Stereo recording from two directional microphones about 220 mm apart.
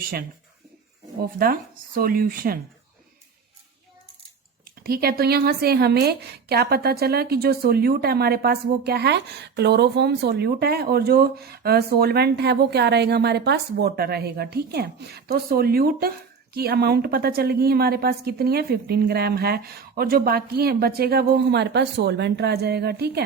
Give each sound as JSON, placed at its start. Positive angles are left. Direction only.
{"t": 0.0, "sound": "speech", "side_deg": -45}
{"t": 4.6, "sound": "speech", "side_deg": -45}